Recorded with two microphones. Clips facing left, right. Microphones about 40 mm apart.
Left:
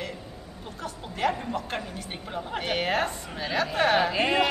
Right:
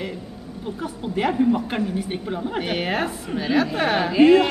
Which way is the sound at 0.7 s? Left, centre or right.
Centre.